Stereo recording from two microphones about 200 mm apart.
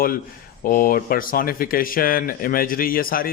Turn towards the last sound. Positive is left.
turn(degrees=45)  # may be behind; listen again after turning